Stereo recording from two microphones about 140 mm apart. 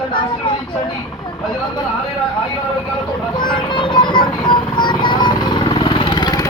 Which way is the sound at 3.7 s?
35° left (ahead or behind).